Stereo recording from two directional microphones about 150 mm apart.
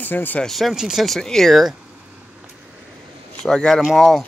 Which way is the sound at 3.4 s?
5° left (ahead or behind).